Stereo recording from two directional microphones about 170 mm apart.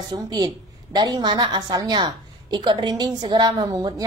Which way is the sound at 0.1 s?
25° right (ahead or behind).